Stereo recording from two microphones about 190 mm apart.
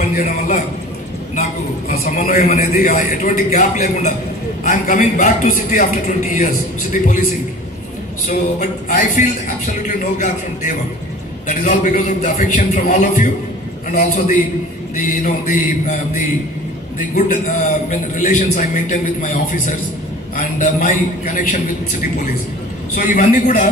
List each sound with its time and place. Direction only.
0.0 s a man's voice: 45° left (ahead or behind)
8.3 s a man's voice: 45° left (ahead or behind)
17.1 s a man's voice: 40° left (ahead or behind)
22.9 s a man's voice: 40° left (ahead or behind)